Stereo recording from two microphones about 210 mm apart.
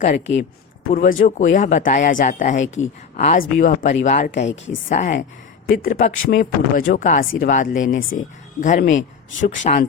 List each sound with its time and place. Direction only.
0.9 s speech: 40° left (ahead or behind)